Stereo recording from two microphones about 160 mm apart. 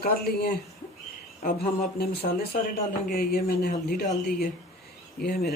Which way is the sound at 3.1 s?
70° left (ahead or behind).